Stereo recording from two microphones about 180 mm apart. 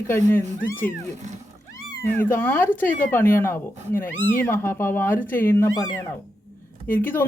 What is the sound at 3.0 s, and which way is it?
Speech, 10° left (ahead or behind).